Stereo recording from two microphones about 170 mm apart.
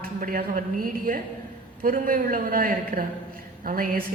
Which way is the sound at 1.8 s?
55° right (ahead or behind).